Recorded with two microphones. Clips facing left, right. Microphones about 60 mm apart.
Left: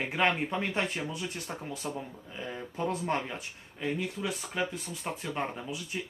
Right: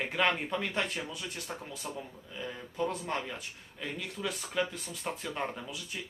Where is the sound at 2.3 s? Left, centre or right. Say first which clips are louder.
Left 1 dB; left.